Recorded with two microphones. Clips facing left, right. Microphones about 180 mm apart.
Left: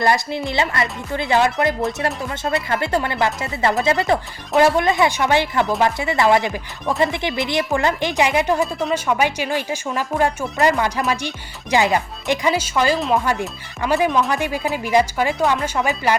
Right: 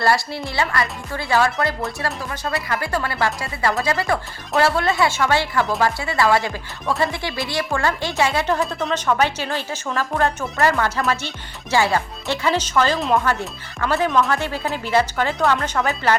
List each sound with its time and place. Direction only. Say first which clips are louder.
0.0 s speech: left 1 dB; 20° left (ahead or behind)
8.6 s speech: left 2 dB; centre (ahead or behind)
9.0 s speech: right 2 dB; 10° left (ahead or behind)